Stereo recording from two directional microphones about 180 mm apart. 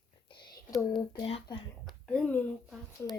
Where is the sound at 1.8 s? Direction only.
5° left (ahead or behind).